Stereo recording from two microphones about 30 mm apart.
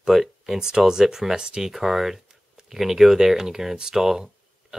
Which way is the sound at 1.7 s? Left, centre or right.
Centre.